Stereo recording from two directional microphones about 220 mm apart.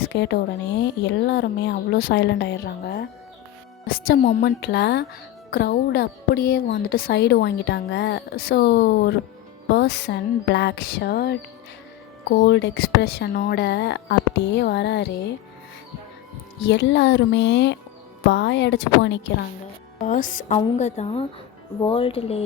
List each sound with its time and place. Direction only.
0.1 s a woman's voice: 50° left (ahead or behind); by 4.4 s 35° left (ahead or behind)
4.4 s a woman's voice: 50° left (ahead or behind)
12.5 s a woman's voice: 50° left (ahead or behind)
16.6 s a woman's voice: 55° left (ahead or behind)
20.0 s a woman's voice: 35° left (ahead or behind)